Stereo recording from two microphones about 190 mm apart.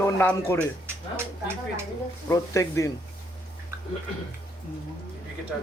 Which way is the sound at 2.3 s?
15° left (ahead or behind).